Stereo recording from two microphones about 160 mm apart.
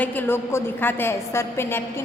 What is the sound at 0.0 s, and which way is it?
A woman's voice, 10° left (ahead or behind).